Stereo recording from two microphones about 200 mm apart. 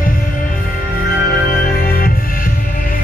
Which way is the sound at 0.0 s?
45° left (ahead or behind).